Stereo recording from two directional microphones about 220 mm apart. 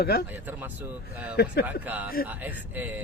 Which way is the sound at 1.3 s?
50° left (ahead or behind).